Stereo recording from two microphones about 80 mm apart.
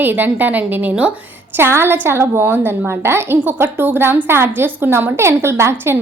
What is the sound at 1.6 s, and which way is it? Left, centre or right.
A woman's voice, right.